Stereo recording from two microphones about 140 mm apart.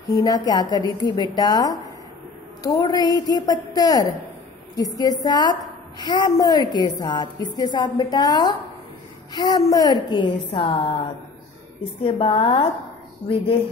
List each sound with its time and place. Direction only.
0.1 s a woman's voice: 25° left (ahead or behind)
12.0 s a woman's voice: 40° left (ahead or behind)